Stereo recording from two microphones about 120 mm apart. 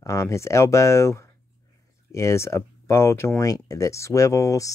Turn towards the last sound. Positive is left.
turn(degrees=25)  # may be behind; listen again after turning